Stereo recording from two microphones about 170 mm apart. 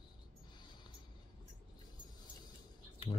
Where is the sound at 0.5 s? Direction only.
25° left (ahead or behind).